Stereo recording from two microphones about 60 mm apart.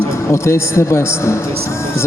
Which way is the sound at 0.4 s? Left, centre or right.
Left.